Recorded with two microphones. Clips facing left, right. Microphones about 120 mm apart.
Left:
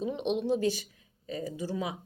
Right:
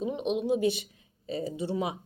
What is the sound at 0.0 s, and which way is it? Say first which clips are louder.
Speech: right 1 dB; 5° right (ahead or behind).